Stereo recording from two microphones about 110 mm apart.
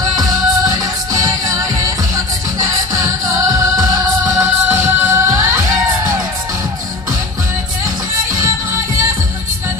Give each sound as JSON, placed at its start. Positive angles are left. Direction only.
{"t": 0.0, "sound": "music", "side_deg": -35}